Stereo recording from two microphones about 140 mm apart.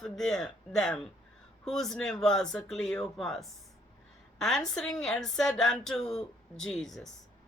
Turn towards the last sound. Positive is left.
turn(degrees=5)  # may be behind; listen again after turning